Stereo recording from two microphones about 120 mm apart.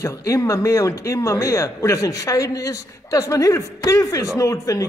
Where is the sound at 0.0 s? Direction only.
25° left (ahead or behind).